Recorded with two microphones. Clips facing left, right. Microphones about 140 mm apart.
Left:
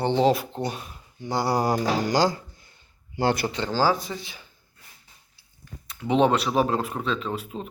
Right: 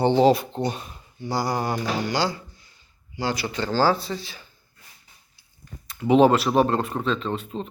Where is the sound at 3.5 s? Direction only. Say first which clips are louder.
Right 2 dB; 15° left (ahead or behind).